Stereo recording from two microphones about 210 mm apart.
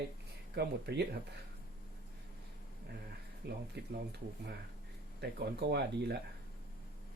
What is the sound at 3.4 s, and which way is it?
Speech, 50° right (ahead or behind).